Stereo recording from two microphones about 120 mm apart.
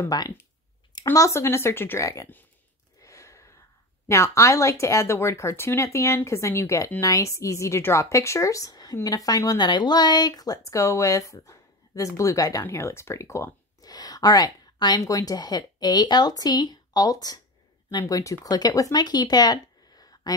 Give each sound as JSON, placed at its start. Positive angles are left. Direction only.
{"t": 0.0, "sound": "a woman's voice", "side_deg": 30}
{"t": 3.0, "sound": "a sound", "side_deg": 25}
{"t": 4.1, "sound": "a woman's voice", "side_deg": 25}